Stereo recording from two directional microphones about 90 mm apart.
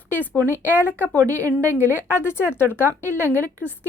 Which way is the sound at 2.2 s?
30° left (ahead or behind).